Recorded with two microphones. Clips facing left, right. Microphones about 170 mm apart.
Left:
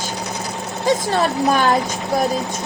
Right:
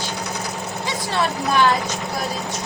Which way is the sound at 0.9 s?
45° left (ahead or behind).